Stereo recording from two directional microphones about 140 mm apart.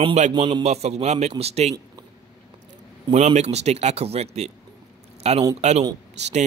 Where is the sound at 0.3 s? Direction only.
30° right (ahead or behind).